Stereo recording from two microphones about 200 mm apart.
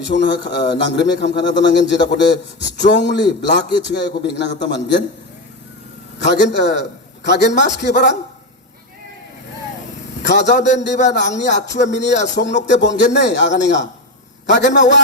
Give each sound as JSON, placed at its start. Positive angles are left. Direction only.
{"t": 0.2, "sound": "speech", "side_deg": 55}
{"t": 6.1, "sound": "speech", "side_deg": 60}
{"t": 10.2, "sound": "speech", "side_deg": 60}
{"t": 10.6, "sound": "a man's voice", "side_deg": 35}
{"t": 11.0, "sound": "speech", "side_deg": 60}